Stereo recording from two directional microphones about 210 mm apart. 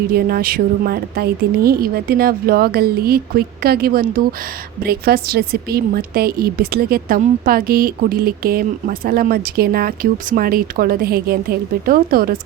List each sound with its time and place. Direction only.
0.1 s a woman's voice: 45° right (ahead or behind)